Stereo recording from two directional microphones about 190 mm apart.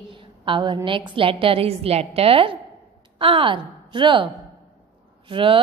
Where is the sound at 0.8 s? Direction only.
25° right (ahead or behind).